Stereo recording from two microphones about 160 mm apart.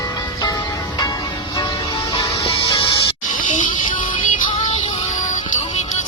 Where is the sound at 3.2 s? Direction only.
55° left (ahead or behind).